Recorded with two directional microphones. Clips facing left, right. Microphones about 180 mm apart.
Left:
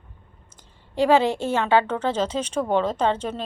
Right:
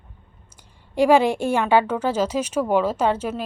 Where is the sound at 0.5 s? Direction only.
10° right (ahead or behind).